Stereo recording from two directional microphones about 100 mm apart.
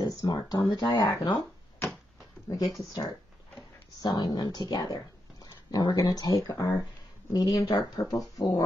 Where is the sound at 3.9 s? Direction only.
45° left (ahead or behind).